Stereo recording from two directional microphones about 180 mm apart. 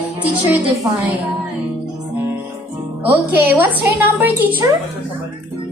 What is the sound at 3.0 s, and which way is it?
A woman's voice, 10° right (ahead or behind).